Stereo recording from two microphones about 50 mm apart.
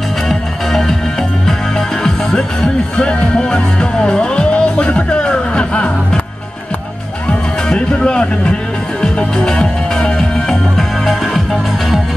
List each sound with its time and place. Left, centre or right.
0.3 s music: centre
2.0 s music: centre
7.2 s music: left; by 12.0 s centre